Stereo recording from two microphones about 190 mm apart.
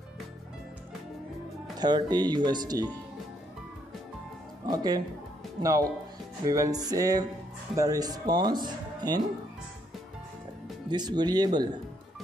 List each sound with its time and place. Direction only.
1.8 s speech: 20° right (ahead or behind)
4.6 s speech: 20° right (ahead or behind)
10.9 s speech: 20° right (ahead or behind)